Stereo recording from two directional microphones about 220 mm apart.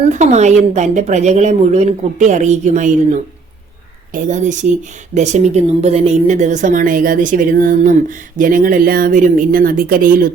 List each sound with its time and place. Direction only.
0.1 s speech: 30° right (ahead or behind)
4.1 s speech: 35° right (ahead or behind)